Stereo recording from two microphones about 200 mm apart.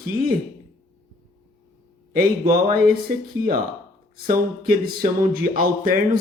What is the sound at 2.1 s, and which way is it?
Speech, 45° right (ahead or behind).